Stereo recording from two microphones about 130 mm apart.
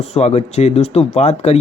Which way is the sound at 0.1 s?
55° left (ahead or behind).